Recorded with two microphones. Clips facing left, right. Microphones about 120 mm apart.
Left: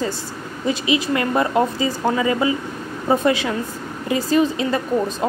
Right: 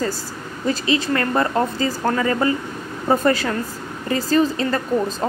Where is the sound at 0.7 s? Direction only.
5° left (ahead or behind).